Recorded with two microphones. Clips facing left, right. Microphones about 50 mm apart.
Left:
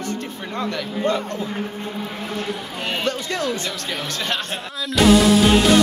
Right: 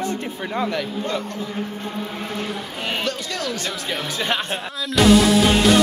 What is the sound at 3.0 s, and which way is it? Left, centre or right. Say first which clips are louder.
Speech: left 3 dB; left.